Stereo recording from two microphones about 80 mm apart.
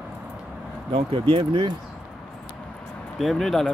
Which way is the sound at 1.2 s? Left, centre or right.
Right.